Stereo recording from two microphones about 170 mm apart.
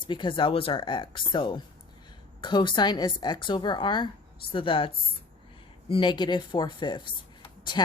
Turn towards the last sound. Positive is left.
turn(degrees=25)  # may be behind; listen again after turning